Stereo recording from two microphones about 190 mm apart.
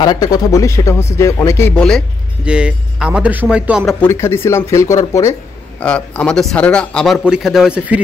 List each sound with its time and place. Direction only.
0.0 s speech: 20° left (ahead or behind)
1.8 s a man's voice: 5° left (ahead or behind)
4.0 s speech: 15° left (ahead or behind)
5.8 s a man's voice: 5° left (ahead or behind)